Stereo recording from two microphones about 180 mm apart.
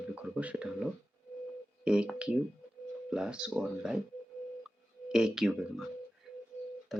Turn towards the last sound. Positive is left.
turn(degrees=0)  # may be behind; listen again after turning